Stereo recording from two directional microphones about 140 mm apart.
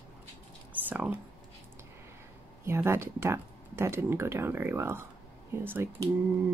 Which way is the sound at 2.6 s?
20° right (ahead or behind).